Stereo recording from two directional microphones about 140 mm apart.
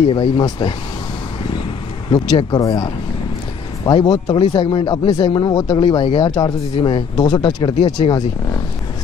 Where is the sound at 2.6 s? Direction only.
25° left (ahead or behind).